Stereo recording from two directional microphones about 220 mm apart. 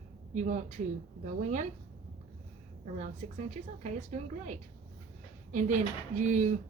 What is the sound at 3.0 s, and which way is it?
A woman's voice, 30° right (ahead or behind).